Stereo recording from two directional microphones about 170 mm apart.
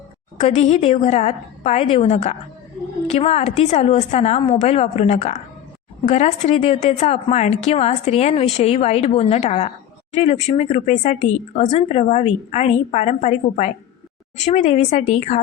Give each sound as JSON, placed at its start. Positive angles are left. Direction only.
{"t": 0.3, "sound": "a woman's voice", "side_deg": 40}